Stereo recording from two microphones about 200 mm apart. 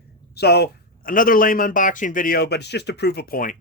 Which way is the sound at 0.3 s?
55° left (ahead or behind).